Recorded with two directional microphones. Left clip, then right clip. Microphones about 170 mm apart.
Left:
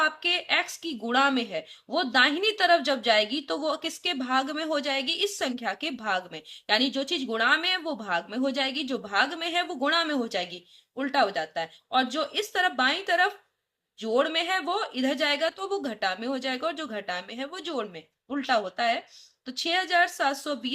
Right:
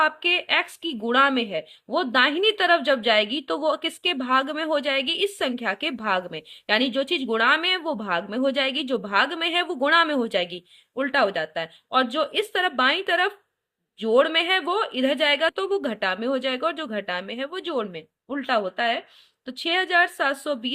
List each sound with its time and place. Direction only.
0.0 s speech: 25° right (ahead or behind)